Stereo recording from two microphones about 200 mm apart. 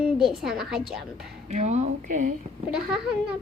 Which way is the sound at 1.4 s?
35° right (ahead or behind).